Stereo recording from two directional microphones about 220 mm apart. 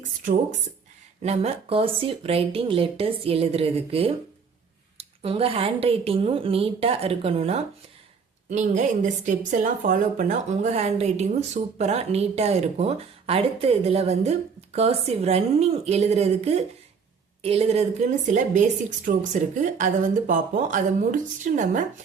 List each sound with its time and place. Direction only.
1.2 s a woman's voice: 30° right (ahead or behind)